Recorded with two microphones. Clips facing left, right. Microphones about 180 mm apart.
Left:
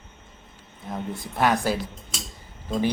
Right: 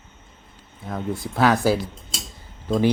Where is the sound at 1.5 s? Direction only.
5° right (ahead or behind).